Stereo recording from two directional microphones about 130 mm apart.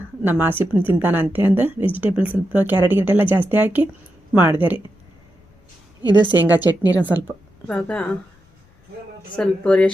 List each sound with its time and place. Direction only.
0.2 s speech: 15° right (ahead or behind)
6.1 s a woman's voice: 35° right (ahead or behind)
6.4 s speech: 15° right (ahead or behind)
7.7 s a woman's voice: 10° left (ahead or behind)
9.3 s a woman's voice: 10° left (ahead or behind)